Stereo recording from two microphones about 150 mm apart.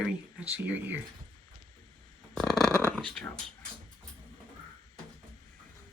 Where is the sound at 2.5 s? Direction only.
25° left (ahead or behind).